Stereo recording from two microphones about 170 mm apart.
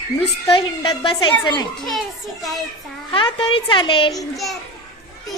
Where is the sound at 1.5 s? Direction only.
Centre (ahead or behind).